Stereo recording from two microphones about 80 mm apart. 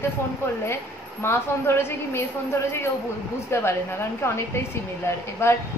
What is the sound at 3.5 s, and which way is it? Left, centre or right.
A woman's voice, left.